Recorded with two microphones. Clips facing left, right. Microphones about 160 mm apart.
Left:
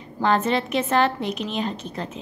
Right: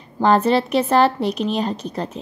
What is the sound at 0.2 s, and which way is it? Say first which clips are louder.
A woman's voice: right 5 dB; 35° right (ahead or behind).